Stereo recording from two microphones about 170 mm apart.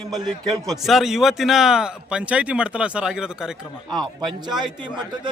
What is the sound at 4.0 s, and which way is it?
Speech, 25° right (ahead or behind).